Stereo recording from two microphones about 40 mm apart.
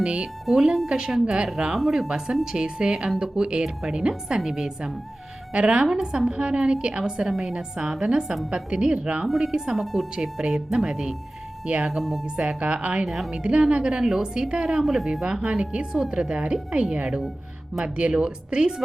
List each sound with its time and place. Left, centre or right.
0.0 s a woman's voice: right
0.5 s a woman's voice: centre
4.4 s a woman's voice: centre
5.5 s a woman's voice: right
9.4 s a woman's voice: centre
9.7 s a woman's voice: centre
11.6 s speech: right
11.9 s speech: centre
12.4 s a woman's voice: right
14.8 s a woman's voice: centre; by 18.7 s right